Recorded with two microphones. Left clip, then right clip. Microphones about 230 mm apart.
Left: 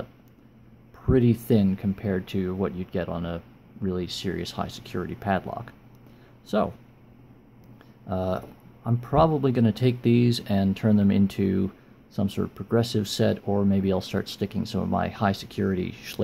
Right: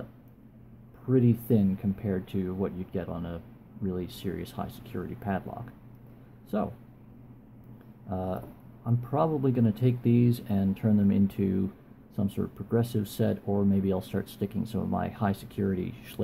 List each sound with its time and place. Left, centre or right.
1.0 s speech: left
8.1 s speech: left